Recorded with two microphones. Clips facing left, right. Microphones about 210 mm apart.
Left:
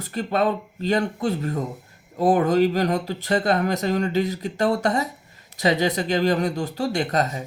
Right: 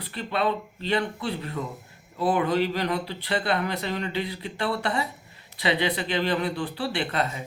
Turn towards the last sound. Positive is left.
turn(degrees=40)  # may be behind; listen again after turning